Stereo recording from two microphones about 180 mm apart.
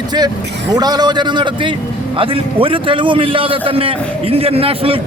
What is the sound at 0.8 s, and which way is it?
A man's voice, 20° right (ahead or behind).